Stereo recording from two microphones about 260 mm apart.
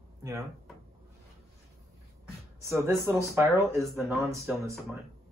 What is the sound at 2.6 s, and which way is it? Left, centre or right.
Speech, centre.